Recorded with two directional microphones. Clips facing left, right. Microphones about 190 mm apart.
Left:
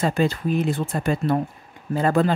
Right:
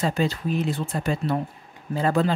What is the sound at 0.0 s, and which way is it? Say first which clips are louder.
Speech: left 3 dB; 50° left (ahead or behind).